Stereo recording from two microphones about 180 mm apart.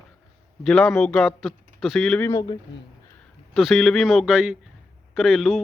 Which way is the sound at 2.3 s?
20° left (ahead or behind).